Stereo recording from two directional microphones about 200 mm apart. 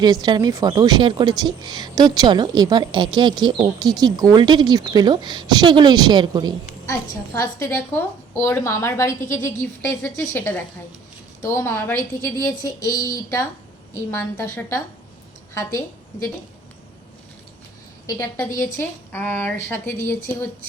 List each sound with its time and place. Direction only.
0.0 s a woman's voice: 20° right (ahead or behind)
7.3 s a woman's voice: 15° left (ahead or behind)
18.0 s a woman's voice: 15° left (ahead or behind)